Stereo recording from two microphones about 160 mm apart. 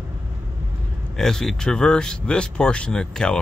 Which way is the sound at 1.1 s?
5° left (ahead or behind).